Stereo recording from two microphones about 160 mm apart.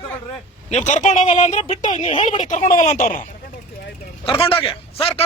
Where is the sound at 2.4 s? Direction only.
50° left (ahead or behind).